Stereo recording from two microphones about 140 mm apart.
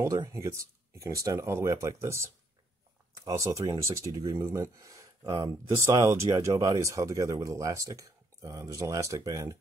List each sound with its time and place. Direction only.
0.0 s speech: 20° right (ahead or behind)